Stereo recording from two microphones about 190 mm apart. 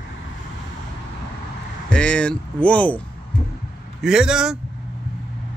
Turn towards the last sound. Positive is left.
turn(degrees=-5)  # may be behind; listen again after turning